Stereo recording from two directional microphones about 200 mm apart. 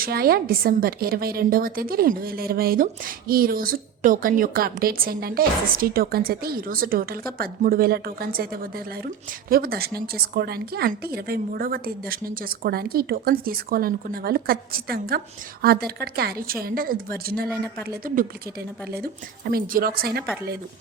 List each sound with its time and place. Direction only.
0.0 s a woman's voice: 50° right (ahead or behind)